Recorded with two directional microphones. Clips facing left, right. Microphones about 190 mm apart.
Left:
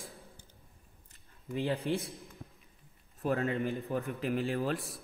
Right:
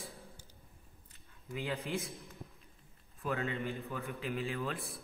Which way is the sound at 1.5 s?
35° left (ahead or behind).